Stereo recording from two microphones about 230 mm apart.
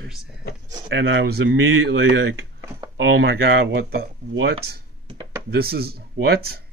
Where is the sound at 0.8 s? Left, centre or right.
Right.